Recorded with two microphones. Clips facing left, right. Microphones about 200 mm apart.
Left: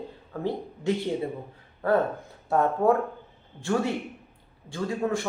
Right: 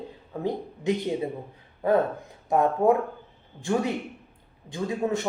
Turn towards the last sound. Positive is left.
turn(degrees=-20)  # may be behind; listen again after turning